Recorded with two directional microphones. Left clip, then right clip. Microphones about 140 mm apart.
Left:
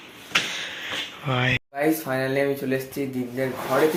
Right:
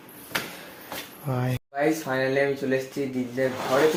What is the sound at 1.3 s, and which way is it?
Speech, 10° right (ahead or behind).